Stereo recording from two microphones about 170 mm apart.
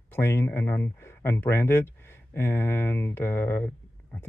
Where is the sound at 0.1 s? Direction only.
15° left (ahead or behind).